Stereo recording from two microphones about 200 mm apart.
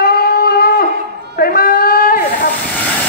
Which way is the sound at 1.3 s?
45° left (ahead or behind).